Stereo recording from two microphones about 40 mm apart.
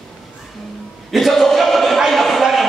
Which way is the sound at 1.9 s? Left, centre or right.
Centre.